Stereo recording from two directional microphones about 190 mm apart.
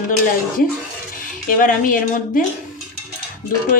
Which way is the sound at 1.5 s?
45° left (ahead or behind).